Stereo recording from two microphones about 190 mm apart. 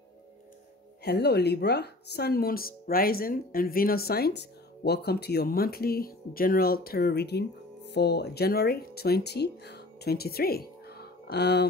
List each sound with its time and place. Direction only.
1.0 s speech: 60° left (ahead or behind)